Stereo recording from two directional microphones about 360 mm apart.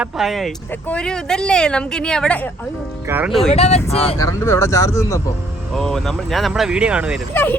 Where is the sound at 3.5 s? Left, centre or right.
Centre.